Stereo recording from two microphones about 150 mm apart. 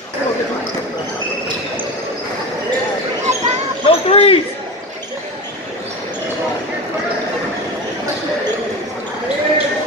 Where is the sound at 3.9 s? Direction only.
40° left (ahead or behind).